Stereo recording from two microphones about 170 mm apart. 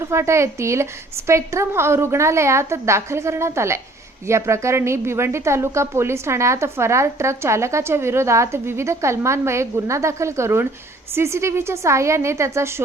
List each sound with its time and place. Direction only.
0.0 s a woman's voice: 15° right (ahead or behind)